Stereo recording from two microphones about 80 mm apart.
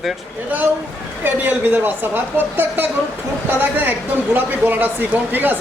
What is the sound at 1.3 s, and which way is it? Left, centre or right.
Speech, right.